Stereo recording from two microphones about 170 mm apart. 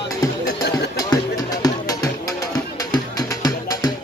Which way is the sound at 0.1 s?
20° left (ahead or behind).